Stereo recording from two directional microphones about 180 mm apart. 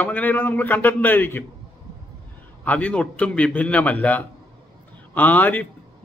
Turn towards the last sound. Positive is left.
turn(degrees=10)  # may be behind; listen again after turning